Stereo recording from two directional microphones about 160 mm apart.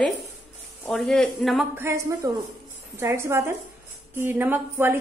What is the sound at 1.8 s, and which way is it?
A woman's voice, 20° right (ahead or behind).